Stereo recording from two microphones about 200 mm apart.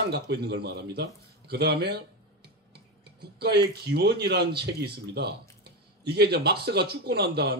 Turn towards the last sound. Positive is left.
turn(degrees=-55)  # may be behind; listen again after turning